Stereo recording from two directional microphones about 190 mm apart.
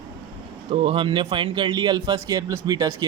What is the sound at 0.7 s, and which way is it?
Speech, 25° right (ahead or behind).